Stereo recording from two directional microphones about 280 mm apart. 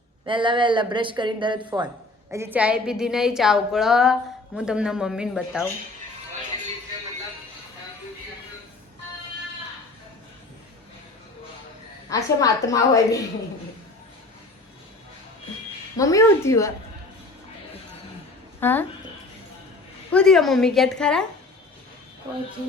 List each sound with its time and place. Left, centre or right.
0.3 s a woman's voice: centre
12.0 s a woman's voice: centre
16.0 s a woman's voice: centre
18.6 s a woman's voice: centre
20.1 s a woman's voice: centre